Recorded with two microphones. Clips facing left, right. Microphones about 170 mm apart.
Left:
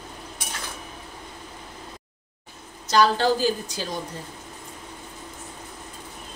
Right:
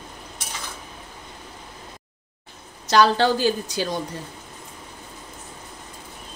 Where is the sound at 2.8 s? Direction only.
80° right.